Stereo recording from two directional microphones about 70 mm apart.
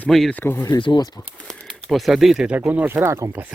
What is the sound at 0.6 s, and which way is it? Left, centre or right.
Speech, left.